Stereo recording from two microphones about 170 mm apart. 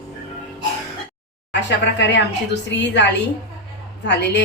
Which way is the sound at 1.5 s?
90° left.